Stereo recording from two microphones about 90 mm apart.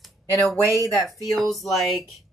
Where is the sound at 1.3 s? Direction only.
Centre (ahead or behind).